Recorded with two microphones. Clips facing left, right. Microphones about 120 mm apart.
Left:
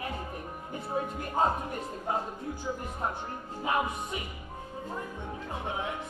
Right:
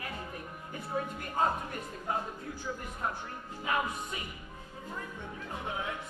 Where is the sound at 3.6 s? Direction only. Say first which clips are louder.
Left 3 dB; 25° left (ahead or behind).